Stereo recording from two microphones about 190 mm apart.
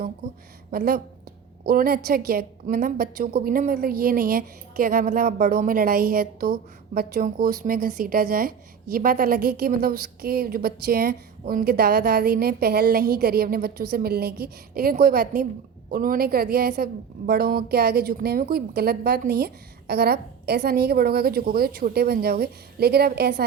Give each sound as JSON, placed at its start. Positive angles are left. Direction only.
{"t": 0.7, "sound": "a woman's voice", "side_deg": -50}